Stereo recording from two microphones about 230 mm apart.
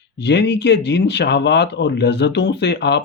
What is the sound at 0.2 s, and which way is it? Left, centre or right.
Speech, left.